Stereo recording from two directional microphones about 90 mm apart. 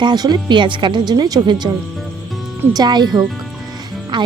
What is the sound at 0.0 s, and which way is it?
Speech, 50° right (ahead or behind).